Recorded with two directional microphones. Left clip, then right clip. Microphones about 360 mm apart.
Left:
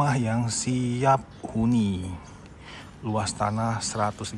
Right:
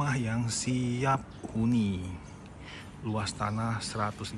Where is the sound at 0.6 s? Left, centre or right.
Left.